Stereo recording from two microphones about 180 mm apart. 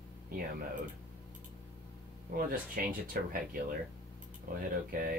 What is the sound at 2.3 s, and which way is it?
Speech, 50° right (ahead or behind).